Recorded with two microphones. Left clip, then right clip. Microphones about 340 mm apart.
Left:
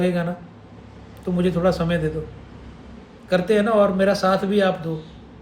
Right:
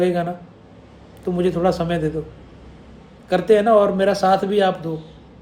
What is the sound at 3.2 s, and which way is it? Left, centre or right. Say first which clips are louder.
A man's voice: right 4 dB; centre.